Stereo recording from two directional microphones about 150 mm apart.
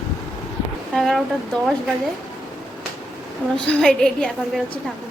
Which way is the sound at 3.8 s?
5° left (ahead or behind).